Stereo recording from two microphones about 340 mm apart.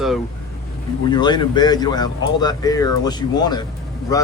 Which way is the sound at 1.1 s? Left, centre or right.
Centre.